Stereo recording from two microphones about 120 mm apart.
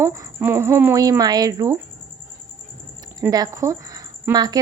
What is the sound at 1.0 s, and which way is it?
Speech, 30° right (ahead or behind).